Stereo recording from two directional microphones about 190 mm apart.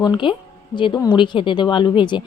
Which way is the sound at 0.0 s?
25° left (ahead or behind).